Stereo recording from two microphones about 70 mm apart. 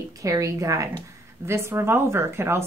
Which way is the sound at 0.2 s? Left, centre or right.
Right.